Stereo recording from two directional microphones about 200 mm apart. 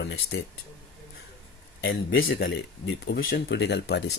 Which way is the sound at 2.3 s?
55° left (ahead or behind).